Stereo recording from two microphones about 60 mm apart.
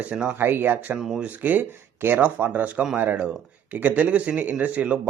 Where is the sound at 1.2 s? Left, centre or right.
Right.